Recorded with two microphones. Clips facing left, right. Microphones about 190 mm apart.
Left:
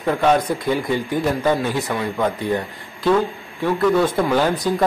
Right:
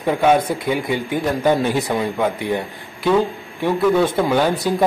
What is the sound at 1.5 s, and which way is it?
Speech, 20° right (ahead or behind).